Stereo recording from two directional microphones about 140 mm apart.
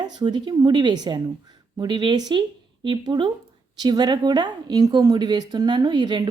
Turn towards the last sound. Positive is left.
turn(degrees=-30)  # may be behind; listen again after turning